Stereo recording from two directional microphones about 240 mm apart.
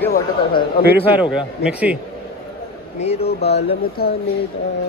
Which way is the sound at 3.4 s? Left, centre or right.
Left.